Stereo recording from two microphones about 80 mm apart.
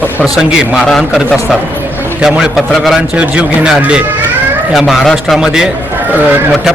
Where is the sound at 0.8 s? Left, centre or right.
Centre.